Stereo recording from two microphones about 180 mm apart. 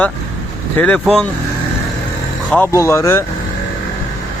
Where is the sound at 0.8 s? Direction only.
5° left (ahead or behind).